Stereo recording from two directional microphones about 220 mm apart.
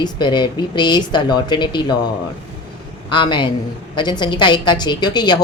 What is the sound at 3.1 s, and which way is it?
Speech, 20° left (ahead or behind).